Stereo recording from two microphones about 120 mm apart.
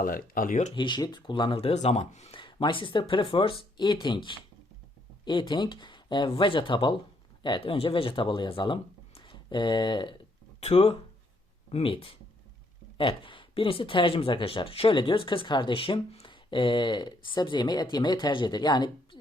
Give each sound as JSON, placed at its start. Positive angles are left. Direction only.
{"t": 0.4, "sound": "speech", "side_deg": 90}
{"t": 0.8, "sound": "speech", "side_deg": 40}
{"t": 2.3, "sound": "speech", "side_deg": 45}
{"t": 10.6, "sound": "speech", "side_deg": 60}